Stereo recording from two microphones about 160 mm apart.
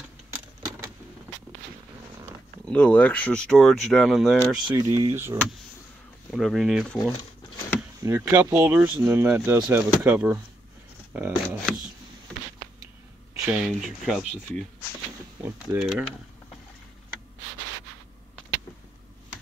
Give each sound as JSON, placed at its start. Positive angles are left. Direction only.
{"t": 2.6, "sound": "speech", "side_deg": 10}
{"t": 4.6, "sound": "speech", "side_deg": -30}
{"t": 5.0, "sound": "speech", "side_deg": -15}
{"t": 6.3, "sound": "speech", "side_deg": 0}
{"t": 8.0, "sound": "speech", "side_deg": -15}
{"t": 13.5, "sound": "speech", "side_deg": -5}
{"t": 15.4, "sound": "speech", "side_deg": -10}